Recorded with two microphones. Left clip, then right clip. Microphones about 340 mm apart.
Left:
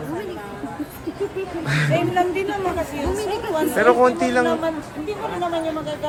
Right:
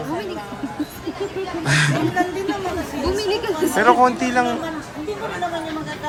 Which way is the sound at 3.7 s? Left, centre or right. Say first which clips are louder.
Right 1 dB; centre.